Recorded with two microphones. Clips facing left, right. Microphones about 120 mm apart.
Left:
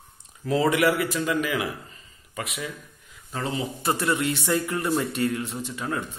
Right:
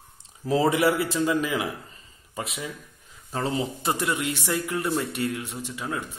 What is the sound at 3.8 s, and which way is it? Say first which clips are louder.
A man's voice: left 2 dB; 20° right (ahead or behind).